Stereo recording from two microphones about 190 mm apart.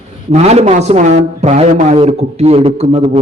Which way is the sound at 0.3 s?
35° right (ahead or behind).